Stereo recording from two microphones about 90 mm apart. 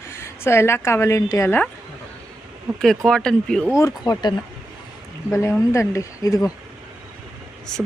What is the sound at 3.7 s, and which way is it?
Speech, 40° left (ahead or behind).